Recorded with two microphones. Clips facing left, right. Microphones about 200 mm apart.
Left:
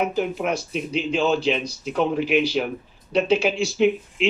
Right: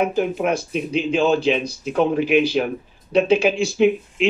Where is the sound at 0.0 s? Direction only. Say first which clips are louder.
Right 3 dB; 50° right (ahead or behind).